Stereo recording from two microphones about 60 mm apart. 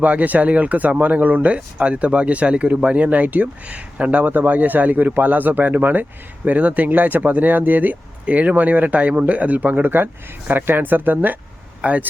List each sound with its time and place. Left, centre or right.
0.0 s speech: right